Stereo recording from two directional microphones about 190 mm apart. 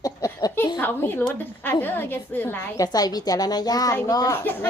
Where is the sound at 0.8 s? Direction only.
10° left (ahead or behind).